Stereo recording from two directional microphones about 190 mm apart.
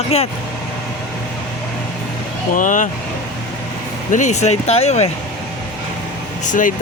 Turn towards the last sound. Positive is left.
turn(degrees=45)  # may be behind; listen again after turning